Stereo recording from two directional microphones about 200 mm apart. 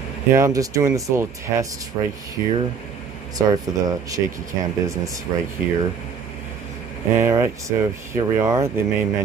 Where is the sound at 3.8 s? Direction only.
15° right (ahead or behind).